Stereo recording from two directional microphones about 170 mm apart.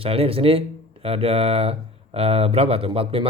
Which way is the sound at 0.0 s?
35° right (ahead or behind).